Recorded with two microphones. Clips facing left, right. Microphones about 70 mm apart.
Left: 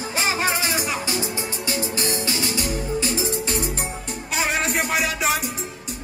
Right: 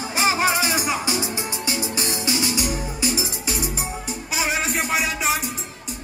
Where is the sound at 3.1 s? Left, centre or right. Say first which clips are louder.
Left 3 dB; centre.